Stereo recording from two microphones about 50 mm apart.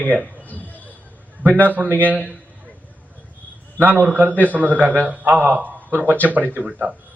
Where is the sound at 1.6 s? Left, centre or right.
Right.